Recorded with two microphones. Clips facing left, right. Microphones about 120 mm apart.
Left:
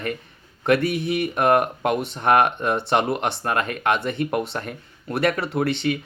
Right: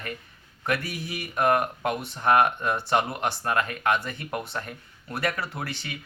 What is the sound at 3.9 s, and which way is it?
Speech, 65° left (ahead or behind).